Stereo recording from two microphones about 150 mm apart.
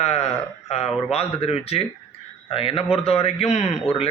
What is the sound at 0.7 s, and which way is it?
A man's voice, 45° left (ahead or behind).